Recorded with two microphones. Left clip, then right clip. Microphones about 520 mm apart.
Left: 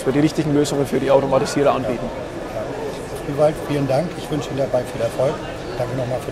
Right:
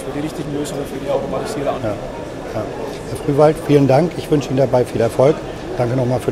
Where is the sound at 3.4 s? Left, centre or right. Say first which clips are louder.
Right 6 dB; right.